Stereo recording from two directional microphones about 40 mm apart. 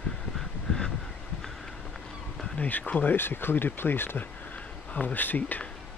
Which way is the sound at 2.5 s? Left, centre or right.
Left.